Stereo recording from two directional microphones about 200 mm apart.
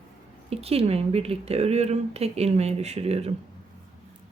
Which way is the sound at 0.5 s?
30° right (ahead or behind).